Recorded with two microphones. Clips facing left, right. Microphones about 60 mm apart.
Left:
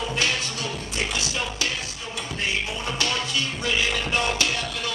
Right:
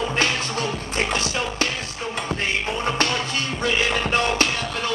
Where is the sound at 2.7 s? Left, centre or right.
Right.